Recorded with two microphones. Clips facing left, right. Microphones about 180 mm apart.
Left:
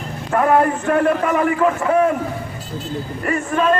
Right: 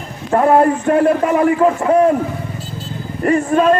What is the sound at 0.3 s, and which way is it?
A man's voice, 30° right (ahead or behind).